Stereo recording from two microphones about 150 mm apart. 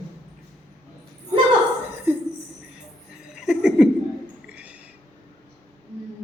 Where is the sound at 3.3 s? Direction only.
5° right (ahead or behind).